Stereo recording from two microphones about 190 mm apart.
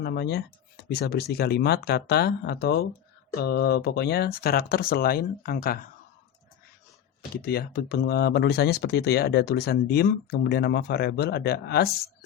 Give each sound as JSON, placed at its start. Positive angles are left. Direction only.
{"t": 0.0, "sound": "speech", "side_deg": 55}
{"t": 7.4, "sound": "speech", "side_deg": 55}